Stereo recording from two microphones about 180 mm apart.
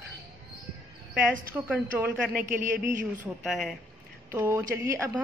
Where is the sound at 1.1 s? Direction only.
10° right (ahead or behind).